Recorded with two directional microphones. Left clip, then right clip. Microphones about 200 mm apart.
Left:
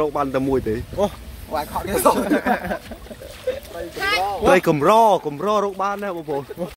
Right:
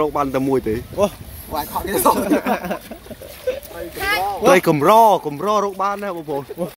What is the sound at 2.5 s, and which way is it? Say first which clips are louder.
Speech: even; 40° right (ahead or behind).